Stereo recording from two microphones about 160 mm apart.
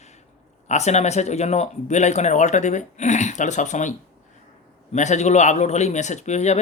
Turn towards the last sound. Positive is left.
turn(degrees=45)  # may be behind; listen again after turning